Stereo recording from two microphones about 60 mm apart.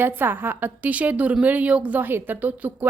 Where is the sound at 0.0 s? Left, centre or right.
Right.